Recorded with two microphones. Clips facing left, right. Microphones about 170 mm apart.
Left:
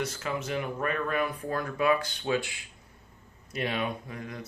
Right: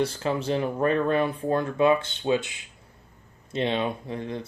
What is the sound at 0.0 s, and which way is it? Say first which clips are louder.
Speech: right 7 dB; 30° right (ahead or behind).